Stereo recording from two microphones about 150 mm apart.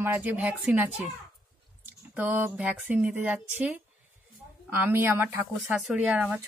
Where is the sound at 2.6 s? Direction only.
10° right (ahead or behind).